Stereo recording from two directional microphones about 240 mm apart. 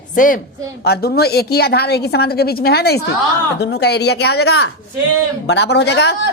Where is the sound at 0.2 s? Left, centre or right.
Left.